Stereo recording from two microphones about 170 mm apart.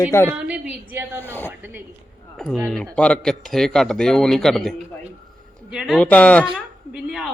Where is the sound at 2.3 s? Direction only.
Centre (ahead or behind).